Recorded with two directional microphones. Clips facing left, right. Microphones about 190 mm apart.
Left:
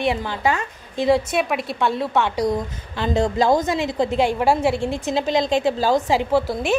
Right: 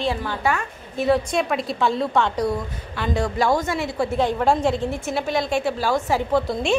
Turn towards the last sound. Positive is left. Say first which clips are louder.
# even
turn(degrees=0)  # may be behind; listen again after turning